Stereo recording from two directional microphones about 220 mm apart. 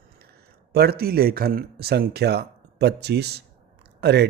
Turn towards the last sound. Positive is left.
turn(degrees=-50)  # may be behind; listen again after turning